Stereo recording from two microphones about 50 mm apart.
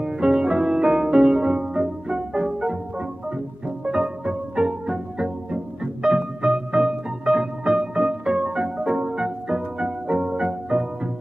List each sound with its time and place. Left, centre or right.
0.0 s music: centre